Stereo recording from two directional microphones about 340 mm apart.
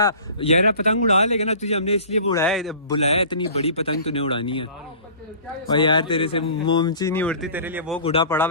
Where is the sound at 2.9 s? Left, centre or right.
Centre.